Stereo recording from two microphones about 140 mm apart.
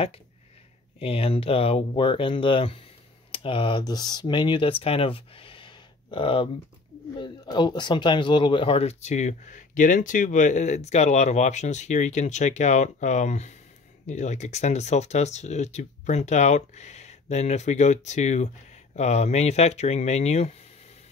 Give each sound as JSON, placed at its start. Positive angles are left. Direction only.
{"t": 0.9, "sound": "speech", "side_deg": 45}